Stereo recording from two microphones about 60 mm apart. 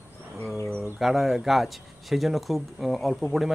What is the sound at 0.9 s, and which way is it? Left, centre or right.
Speech, centre.